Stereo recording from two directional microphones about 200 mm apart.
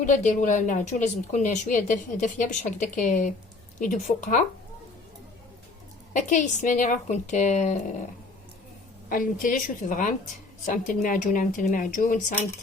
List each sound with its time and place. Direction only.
0.0 s a woman's voice: 40° left (ahead or behind)
6.1 s a woman's voice: 40° left (ahead or behind)
9.0 s a woman's voice: 45° left (ahead or behind)